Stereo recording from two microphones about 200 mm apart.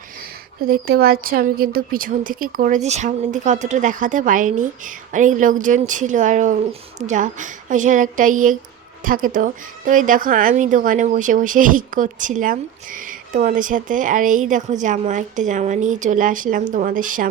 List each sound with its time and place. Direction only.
0.6 s a woman's voice: 50° right (ahead or behind)